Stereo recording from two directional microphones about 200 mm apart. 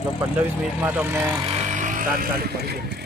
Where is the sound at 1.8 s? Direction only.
40° right (ahead or behind).